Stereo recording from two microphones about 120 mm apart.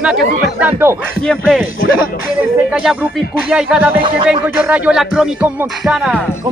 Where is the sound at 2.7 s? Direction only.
5° right (ahead or behind).